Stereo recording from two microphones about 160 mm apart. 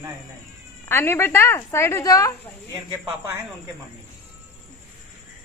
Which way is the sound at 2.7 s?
20° right (ahead or behind).